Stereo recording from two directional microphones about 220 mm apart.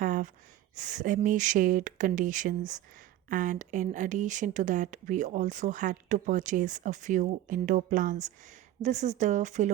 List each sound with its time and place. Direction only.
0.0 s gasp: 35° right (ahead or behind)
0.8 s speech: 35° right (ahead or behind)